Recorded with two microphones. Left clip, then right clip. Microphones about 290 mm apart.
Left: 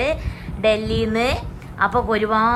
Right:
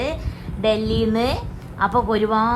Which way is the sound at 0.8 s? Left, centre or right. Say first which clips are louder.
Even; right.